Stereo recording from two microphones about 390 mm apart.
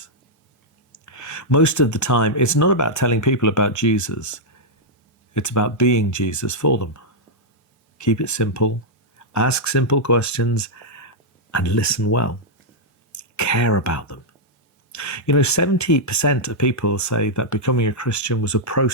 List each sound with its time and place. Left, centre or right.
1.0 s speech: left